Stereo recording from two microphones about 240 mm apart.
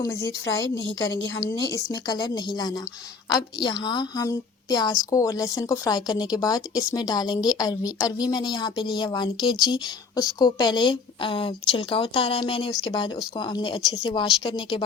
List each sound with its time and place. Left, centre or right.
0.0 s a woman's voice: centre